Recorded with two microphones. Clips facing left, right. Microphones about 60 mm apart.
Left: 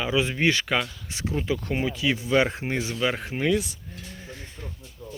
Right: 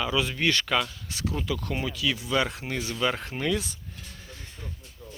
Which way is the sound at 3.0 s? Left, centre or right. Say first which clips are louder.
Even; centre.